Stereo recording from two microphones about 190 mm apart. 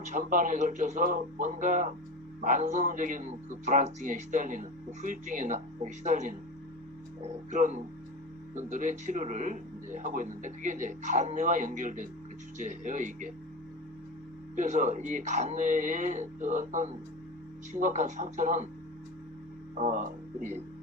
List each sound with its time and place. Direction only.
0.1 s a man's voice: 45° right (ahead or behind)
7.5 s a man's voice: 40° right (ahead or behind)
14.5 s a man's voice: 40° right (ahead or behind)
19.8 s a man's voice: 40° right (ahead or behind)